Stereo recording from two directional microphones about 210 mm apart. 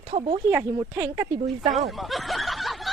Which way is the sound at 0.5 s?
10° right (ahead or behind).